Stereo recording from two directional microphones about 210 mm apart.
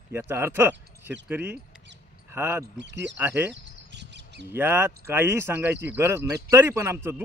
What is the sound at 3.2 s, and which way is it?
Speech, 10° right (ahead or behind).